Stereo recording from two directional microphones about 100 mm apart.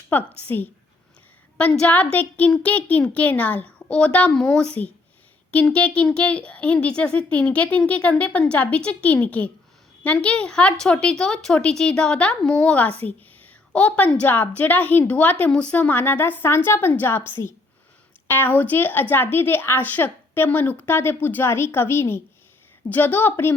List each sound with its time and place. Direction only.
0.1 s speech: 20° left (ahead or behind)
1.5 s speech: 10° left (ahead or behind)
18.3 s speech: 20° left (ahead or behind)